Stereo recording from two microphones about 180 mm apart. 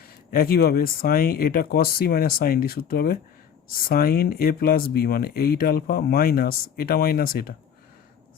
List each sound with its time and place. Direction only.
0.3 s speech: 55° left (ahead or behind)